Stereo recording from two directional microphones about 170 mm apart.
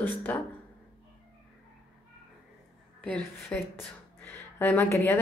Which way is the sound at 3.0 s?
10° left (ahead or behind).